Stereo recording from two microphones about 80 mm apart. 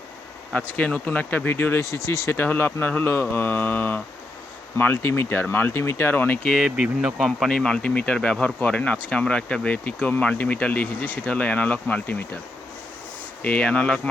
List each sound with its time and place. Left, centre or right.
0.5 s speech: centre
6.6 s speech: centre; by 12.4 s left
13.4 s speech: centre